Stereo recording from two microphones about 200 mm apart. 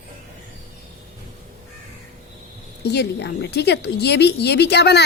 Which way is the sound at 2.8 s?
55° left (ahead or behind).